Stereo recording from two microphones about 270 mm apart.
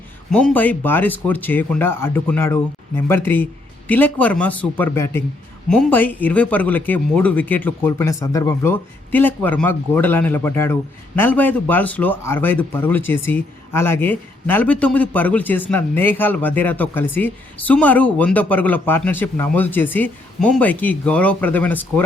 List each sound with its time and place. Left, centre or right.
0.3 s a man's voice: centre